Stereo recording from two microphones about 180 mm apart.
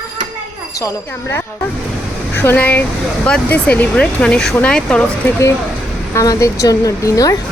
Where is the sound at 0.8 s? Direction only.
15° left (ahead or behind).